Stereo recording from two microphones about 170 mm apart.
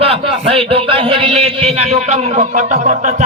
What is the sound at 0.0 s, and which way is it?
A man's voice, 35° right (ahead or behind).